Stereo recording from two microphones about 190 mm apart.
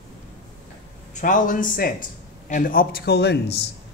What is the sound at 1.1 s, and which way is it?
A man's voice, 45° left (ahead or behind).